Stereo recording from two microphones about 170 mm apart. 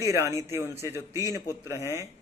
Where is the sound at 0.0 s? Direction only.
15° right (ahead or behind).